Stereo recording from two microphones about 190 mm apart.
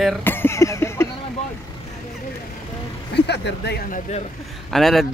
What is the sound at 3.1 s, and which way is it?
Speech, 60° left (ahead or behind).